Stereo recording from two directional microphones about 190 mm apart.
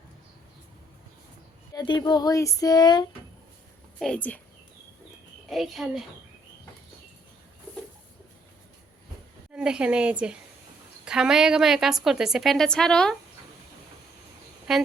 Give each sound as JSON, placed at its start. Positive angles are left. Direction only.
{"t": 1.7, "sound": "speech", "side_deg": 20}
{"t": 4.0, "sound": "speech", "side_deg": 5}
{"t": 5.5, "sound": "a woman's voice", "side_deg": 0}
{"t": 9.5, "sound": "a woman's voice", "side_deg": -5}
{"t": 14.7, "sound": "a woman's voice", "side_deg": 0}